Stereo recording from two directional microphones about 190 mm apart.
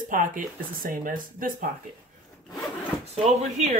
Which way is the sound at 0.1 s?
45° right (ahead or behind).